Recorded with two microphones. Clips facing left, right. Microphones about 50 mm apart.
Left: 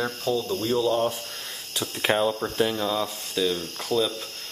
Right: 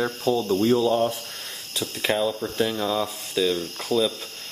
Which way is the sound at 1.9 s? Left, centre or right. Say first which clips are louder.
Left 1 dB; left.